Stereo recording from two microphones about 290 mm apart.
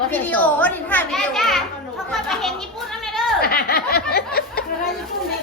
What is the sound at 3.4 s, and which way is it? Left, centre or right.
Speech, left.